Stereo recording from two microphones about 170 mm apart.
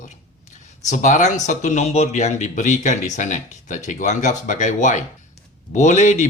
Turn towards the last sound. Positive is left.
turn(degrees=45)  # may be behind; listen again after turning